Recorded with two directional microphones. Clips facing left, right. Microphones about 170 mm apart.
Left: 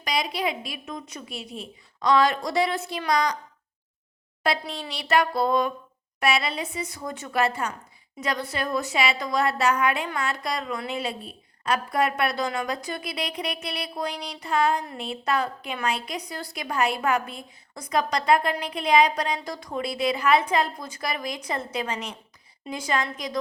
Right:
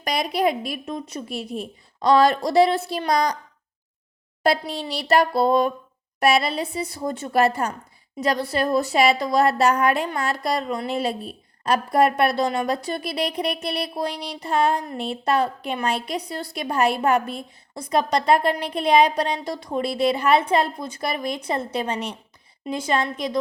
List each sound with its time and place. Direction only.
0.0 s a woman's voice: 50° right (ahead or behind)
0.9 s a woman's voice: 30° right (ahead or behind)
1.2 s a woman's voice: 40° right (ahead or behind)
4.7 s a woman's voice: 35° right (ahead or behind)